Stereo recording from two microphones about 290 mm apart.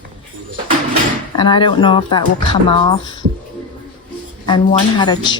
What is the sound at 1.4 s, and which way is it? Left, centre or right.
Speech, centre.